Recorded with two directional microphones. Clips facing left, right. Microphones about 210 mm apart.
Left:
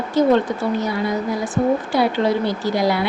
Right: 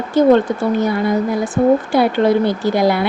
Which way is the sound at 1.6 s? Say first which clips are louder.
Right 5 dB; 45° right (ahead or behind).